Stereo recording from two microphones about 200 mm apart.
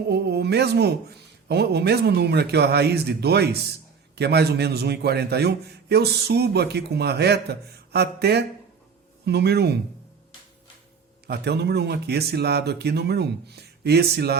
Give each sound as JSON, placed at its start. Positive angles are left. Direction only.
{"t": 0.1, "sound": "a man's voice", "side_deg": -55}
{"t": 11.3, "sound": "a man's voice", "side_deg": -55}